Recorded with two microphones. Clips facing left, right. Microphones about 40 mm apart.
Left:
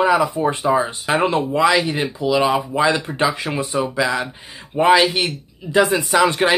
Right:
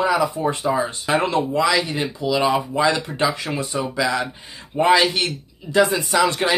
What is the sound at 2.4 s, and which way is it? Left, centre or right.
Speech, centre.